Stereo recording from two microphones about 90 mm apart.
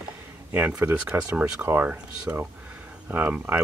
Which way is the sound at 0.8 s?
25° right (ahead or behind).